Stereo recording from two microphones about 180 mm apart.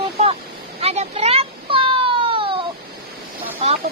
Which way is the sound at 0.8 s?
35° right (ahead or behind).